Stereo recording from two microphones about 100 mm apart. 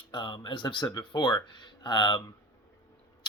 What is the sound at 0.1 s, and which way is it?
Speech, 50° left (ahead or behind).